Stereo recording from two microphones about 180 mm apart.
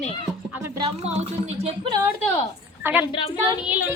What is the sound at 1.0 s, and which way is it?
Speech, 40° right (ahead or behind).